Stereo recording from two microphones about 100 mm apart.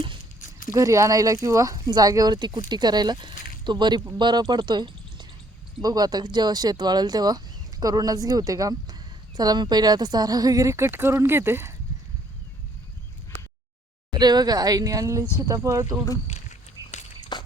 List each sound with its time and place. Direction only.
0.7 s speech: 35° right (ahead or behind)
10.8 s speech: 20° right (ahead or behind)
14.1 s speech: 45° right (ahead or behind)
17.3 s a sound: 50° left (ahead or behind)